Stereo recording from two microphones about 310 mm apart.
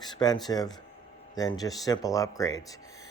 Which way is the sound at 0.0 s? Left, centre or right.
Centre.